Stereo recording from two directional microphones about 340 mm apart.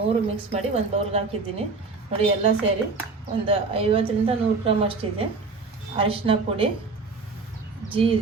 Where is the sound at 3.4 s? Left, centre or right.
Centre.